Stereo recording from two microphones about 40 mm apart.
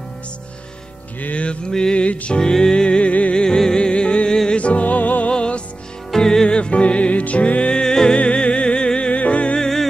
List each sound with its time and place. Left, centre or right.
1.3 s music: left
1.7 s music: left
3.1 s music: left
3.4 s music: centre; by 5.3 s left
5.3 s music: left
6.1 s music: centre; by 7.8 s left
7.8 s music: centre
8.2 s music: left
9.6 s music: centre